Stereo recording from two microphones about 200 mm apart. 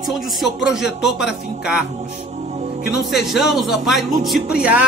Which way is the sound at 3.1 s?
Centre (ahead or behind).